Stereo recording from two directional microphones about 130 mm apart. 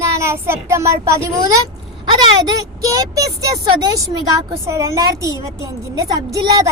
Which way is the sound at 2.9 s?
25° right (ahead or behind).